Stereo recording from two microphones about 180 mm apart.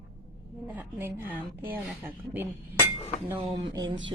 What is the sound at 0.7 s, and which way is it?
A woman's voice, 10° right (ahead or behind).